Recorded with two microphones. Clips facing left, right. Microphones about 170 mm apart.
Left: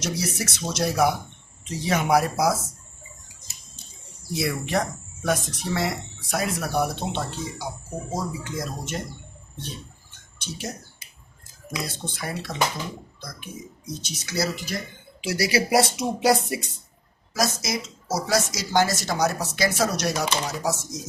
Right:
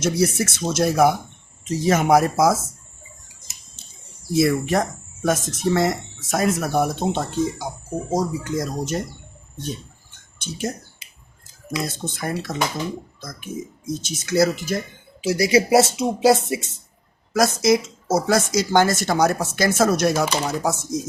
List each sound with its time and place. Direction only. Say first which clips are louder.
0.0 s speech: right 8 dB; 50° right (ahead or behind)
4.4 s speech: right 7 dB; 45° right (ahead or behind)
10.3 s speech: right 7 dB; 50° right (ahead or behind)
12.0 s speech: right 5 dB; 45° right (ahead or behind)
15.3 s speech: right 5 dB; 25° right (ahead or behind)
17.3 s speech: right 9 dB; 55° right (ahead or behind)